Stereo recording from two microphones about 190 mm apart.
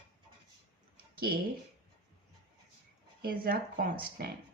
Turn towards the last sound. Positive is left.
turn(degrees=-55)  # may be behind; listen again after turning